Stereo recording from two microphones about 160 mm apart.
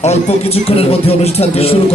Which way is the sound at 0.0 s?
40° left (ahead or behind).